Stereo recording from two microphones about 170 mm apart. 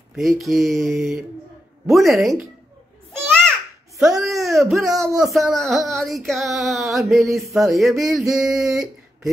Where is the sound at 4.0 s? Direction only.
Centre (ahead or behind).